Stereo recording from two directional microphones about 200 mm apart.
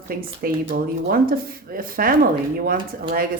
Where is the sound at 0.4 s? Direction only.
50° right (ahead or behind).